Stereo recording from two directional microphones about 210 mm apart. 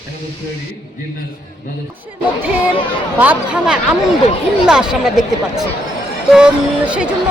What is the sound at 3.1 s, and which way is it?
Speech, 5° right (ahead or behind).